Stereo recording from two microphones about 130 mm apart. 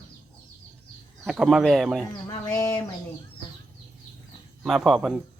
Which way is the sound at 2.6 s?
30° left (ahead or behind).